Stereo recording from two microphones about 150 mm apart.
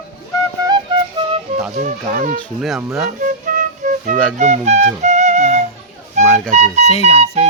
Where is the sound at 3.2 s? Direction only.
60° right (ahead or behind).